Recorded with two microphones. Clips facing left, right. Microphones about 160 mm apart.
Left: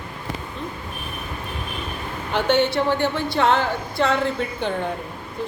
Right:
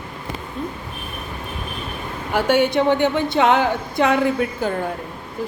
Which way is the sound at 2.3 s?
10° right (ahead or behind).